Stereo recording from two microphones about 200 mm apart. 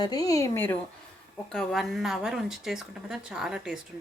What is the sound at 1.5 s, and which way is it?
Speech, centre (ahead or behind).